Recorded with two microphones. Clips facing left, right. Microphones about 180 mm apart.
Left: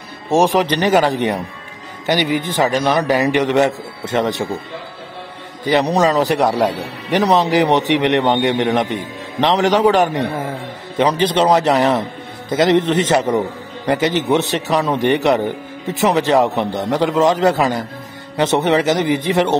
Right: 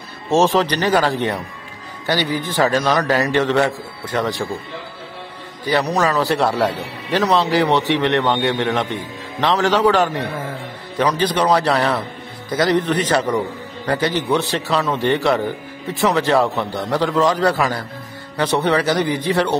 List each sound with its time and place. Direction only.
0.3 s a man's voice: 15° left (ahead or behind)
5.9 s a man's voice: 20° left (ahead or behind)